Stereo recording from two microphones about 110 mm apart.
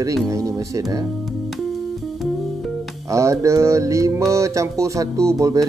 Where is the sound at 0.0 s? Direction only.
30° right (ahead or behind).